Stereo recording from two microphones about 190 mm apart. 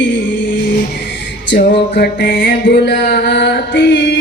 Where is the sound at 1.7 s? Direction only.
65° left (ahead or behind).